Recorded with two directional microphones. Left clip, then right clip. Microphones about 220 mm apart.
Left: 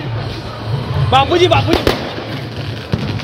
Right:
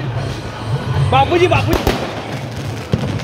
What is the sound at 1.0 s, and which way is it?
Music, 35° left (ahead or behind).